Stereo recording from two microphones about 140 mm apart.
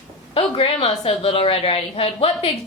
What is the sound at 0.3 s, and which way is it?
A woman's voice, 40° left (ahead or behind).